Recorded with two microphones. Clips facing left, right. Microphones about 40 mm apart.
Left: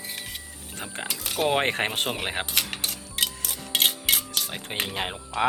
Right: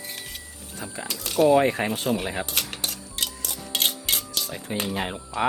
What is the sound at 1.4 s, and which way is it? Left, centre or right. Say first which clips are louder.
Speech: right 4 dB; left.